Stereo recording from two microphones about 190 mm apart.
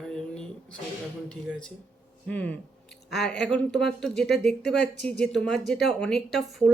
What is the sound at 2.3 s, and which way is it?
Speech, 10° left (ahead or behind).